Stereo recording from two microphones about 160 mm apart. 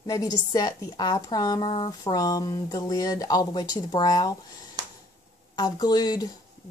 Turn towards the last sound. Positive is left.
turn(degrees=25)  # may be behind; listen again after turning